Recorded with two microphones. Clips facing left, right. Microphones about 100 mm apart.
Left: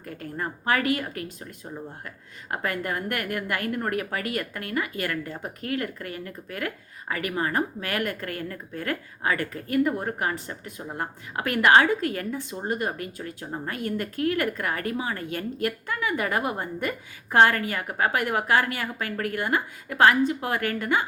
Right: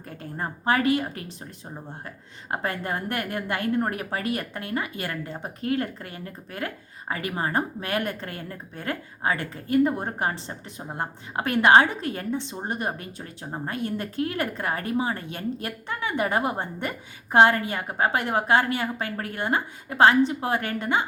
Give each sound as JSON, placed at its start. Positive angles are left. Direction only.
{"t": 0.0, "sound": "a woman's voice", "side_deg": -25}